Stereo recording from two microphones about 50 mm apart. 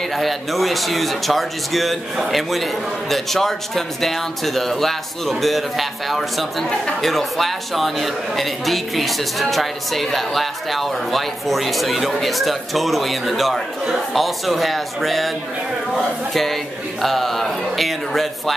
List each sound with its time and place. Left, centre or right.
0.1 s a man's voice: centre